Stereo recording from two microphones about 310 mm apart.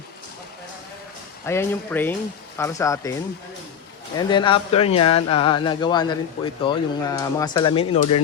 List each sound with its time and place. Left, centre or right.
1.5 s speech: centre
4.2 s speech: centre